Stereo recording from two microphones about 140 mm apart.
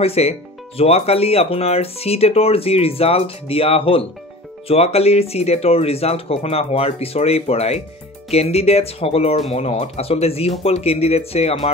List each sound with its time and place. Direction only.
0.0 s speech: 45° left (ahead or behind)